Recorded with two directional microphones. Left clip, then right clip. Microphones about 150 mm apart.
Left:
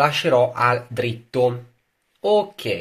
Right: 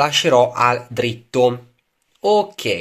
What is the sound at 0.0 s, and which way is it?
Speech, 30° right (ahead or behind).